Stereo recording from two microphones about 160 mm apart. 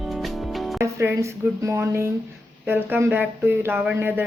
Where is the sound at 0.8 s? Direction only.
15° right (ahead or behind).